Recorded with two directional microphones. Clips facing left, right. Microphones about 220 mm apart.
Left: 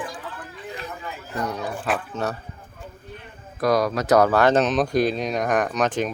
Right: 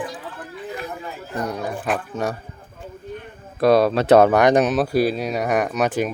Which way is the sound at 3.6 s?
30° right (ahead or behind).